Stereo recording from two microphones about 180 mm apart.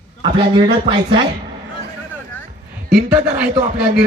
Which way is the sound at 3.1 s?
5° right (ahead or behind).